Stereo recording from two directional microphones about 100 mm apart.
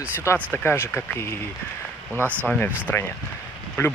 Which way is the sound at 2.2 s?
20° right (ahead or behind).